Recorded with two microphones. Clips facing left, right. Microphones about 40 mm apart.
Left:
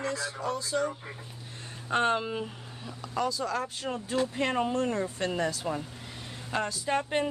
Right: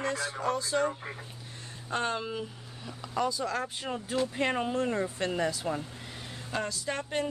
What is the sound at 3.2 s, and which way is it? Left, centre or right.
Speech, centre.